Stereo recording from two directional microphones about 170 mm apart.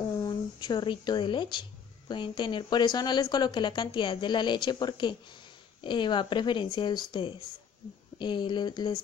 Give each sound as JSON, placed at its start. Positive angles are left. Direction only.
{"t": 0.2, "sound": "speech", "side_deg": 25}